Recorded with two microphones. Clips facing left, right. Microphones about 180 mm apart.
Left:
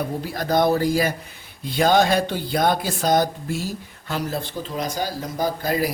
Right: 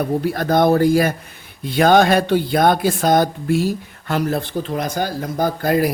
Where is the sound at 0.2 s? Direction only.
60° right (ahead or behind).